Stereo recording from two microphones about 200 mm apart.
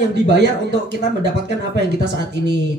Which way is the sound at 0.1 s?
60° right (ahead or behind).